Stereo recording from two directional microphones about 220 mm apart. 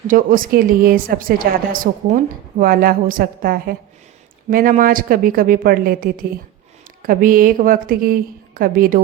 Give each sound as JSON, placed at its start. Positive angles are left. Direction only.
{"t": 0.1, "sound": "a woman's voice", "side_deg": -40}